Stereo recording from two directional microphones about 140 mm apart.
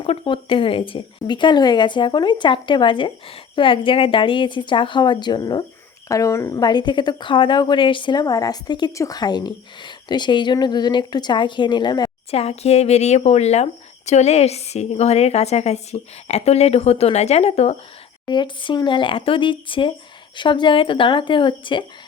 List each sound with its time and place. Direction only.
0.0 s a woman's voice: 40° left (ahead or behind)
12.3 s speech: 45° left (ahead or behind)
18.3 s a woman's voice: 35° left (ahead or behind)